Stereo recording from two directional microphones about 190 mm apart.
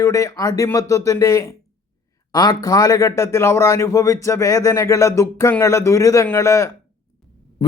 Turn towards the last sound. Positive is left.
turn(degrees=15)  # may be behind; listen again after turning